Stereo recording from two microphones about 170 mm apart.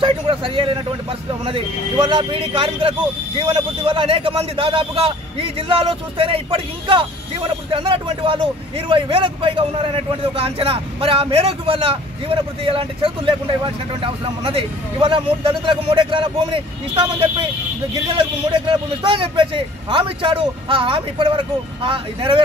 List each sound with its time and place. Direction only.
0.0 s a man's voice: 30° right (ahead or behind)
18.7 s a man's voice: 30° right (ahead or behind)